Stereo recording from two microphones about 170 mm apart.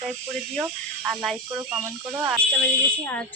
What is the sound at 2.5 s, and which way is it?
Speech, 10° left (ahead or behind).